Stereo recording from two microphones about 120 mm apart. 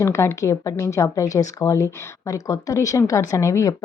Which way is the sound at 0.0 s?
20° left (ahead or behind).